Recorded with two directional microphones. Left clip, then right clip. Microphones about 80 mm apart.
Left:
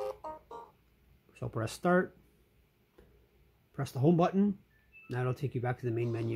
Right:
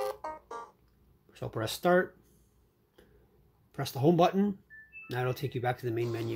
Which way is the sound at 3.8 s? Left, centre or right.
Left.